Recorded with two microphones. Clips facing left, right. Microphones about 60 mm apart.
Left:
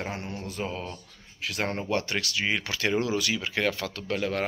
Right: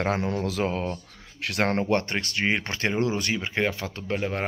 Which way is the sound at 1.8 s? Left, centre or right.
Right.